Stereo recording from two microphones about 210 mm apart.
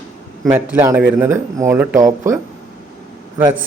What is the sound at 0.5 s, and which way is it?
Speech, 10° right (ahead or behind).